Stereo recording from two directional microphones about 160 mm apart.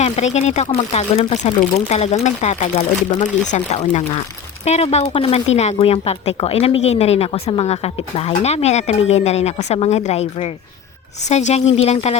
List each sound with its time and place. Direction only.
0.0 s speech: 45° left (ahead or behind)